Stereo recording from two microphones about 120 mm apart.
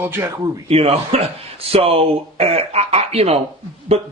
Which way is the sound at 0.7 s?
60° right (ahead or behind).